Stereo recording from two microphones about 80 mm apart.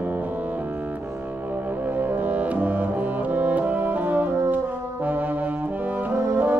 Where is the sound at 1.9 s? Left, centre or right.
Right.